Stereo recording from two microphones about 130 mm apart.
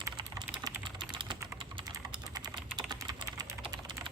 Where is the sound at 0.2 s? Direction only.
35° right (ahead or behind).